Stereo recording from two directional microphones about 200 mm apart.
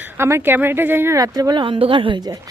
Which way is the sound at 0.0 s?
10° right (ahead or behind).